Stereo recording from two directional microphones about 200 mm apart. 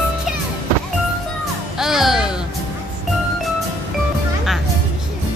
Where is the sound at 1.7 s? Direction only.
Centre (ahead or behind).